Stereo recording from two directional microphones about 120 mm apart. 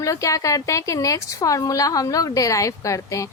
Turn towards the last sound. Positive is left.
turn(degrees=25)  # may be behind; listen again after turning